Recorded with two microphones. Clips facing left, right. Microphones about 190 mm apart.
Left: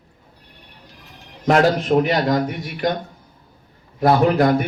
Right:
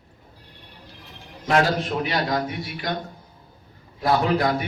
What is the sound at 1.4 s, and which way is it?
Speech, 45° left (ahead or behind).